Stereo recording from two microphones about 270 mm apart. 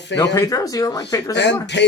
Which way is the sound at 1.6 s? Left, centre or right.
Left.